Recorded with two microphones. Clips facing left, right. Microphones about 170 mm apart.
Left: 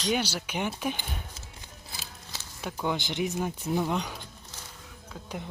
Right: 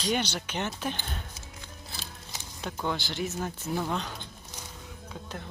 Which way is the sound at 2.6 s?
10° left (ahead or behind).